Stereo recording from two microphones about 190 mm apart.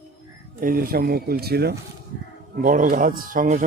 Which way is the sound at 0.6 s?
50° right (ahead or behind).